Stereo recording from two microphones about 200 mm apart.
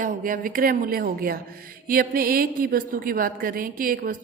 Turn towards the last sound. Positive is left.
turn(degrees=-45)  # may be behind; listen again after turning